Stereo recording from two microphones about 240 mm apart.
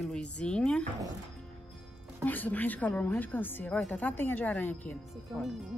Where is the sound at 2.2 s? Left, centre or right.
Centre.